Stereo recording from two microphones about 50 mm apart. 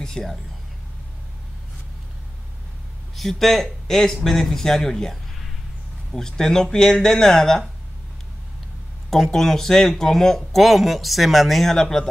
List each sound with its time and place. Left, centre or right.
0.0 s speech: centre
3.2 s speech: centre
9.1 s speech: centre